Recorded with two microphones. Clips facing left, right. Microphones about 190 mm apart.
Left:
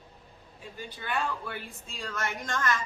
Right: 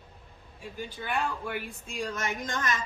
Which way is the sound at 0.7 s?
15° right (ahead or behind).